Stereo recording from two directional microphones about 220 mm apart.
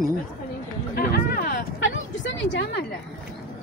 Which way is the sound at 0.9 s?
40° left (ahead or behind).